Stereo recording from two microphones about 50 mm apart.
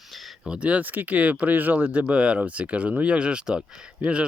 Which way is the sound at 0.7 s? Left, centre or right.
Right.